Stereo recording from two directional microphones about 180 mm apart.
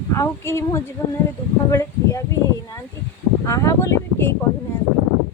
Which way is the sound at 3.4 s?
15° left (ahead or behind).